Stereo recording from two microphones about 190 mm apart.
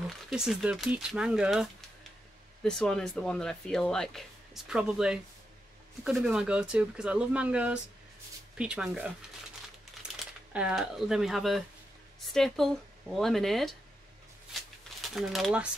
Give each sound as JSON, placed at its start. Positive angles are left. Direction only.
{"t": 0.3, "sound": "speech", "side_deg": -5}
{"t": 10.1, "sound": "speech", "side_deg": -5}
{"t": 15.0, "sound": "speech", "side_deg": 0}